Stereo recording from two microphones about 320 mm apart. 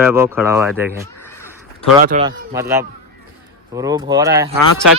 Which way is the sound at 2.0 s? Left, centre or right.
Right.